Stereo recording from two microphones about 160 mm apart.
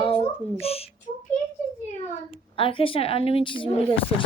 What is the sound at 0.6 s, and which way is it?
Speech, 40° left (ahead or behind).